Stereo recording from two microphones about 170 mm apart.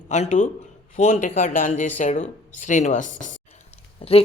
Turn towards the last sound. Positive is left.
turn(degrees=35)  # may be behind; listen again after turning